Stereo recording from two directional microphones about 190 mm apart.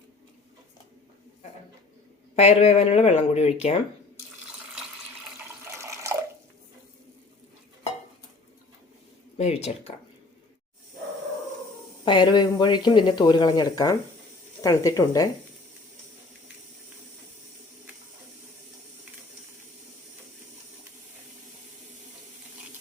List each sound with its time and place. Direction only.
2.3 s speech: 35° left (ahead or behind)
5.6 s water: 15° right (ahead or behind)
9.4 s speech: 35° left (ahead or behind)
12.0 s speech: 25° left (ahead or behind)